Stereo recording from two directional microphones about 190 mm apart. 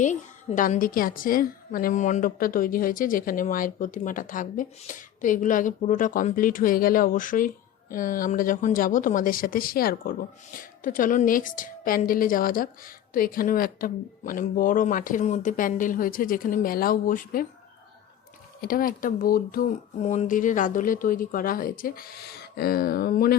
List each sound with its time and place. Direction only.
0.0 s a woman's voice: 40° left (ahead or behind)
18.6 s a woman's voice: 50° left (ahead or behind)
20.0 s a woman's voice: 40° left (ahead or behind)